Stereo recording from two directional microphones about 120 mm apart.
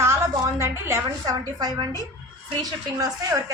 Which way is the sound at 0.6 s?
20° right (ahead or behind).